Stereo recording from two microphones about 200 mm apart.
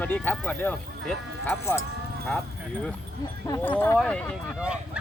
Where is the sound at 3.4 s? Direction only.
15° left (ahead or behind); by 5.0 s 5° right (ahead or behind).